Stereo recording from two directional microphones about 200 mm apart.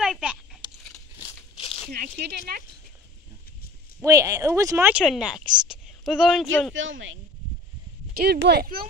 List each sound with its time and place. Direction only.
0.0 s a sound: 5° right (ahead or behind)
1.6 s a sound: 30° left (ahead or behind)
1.9 s speech: 50° right (ahead or behind)
4.0 s speech: 15° right (ahead or behind)
6.7 s speech: 75° right (ahead or behind)
8.2 s speech: 50° right (ahead or behind)